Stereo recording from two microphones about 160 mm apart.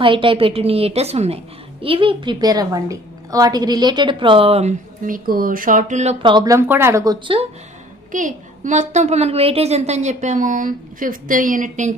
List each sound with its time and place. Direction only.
0.0 s a woman's voice: 30° right (ahead or behind); by 6.1 s 50° right (ahead or behind)
6.2 s speech: 25° right (ahead or behind)
8.1 s a woman's voice: 55° right (ahead or behind)